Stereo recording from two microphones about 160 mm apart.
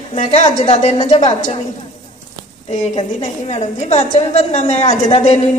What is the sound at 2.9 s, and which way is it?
A woman's voice, 40° left (ahead or behind).